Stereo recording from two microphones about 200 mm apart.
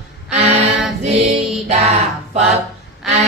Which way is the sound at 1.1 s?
30° right (ahead or behind).